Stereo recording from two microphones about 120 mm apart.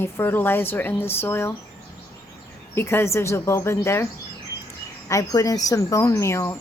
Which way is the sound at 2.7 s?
20° left (ahead or behind).